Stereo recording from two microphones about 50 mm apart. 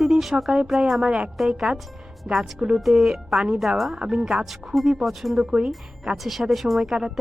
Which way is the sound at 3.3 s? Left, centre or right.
Centre.